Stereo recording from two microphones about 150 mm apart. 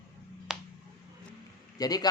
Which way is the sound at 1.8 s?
25° left (ahead or behind).